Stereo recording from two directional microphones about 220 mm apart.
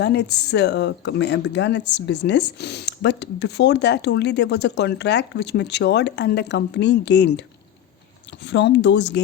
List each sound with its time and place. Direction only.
0.0 s speech: 50° left (ahead or behind)